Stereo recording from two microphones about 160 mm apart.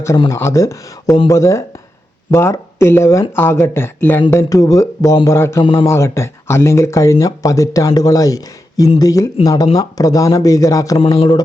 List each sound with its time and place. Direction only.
0.3 s speech: 20° left (ahead or behind)
5.6 s a man's voice: 30° left (ahead or behind)
5.9 s speech: 15° left (ahead or behind)
10.9 s a man's voice: 35° left (ahead or behind)